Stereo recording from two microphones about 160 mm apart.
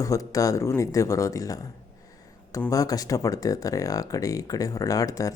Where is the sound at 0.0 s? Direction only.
20° left (ahead or behind).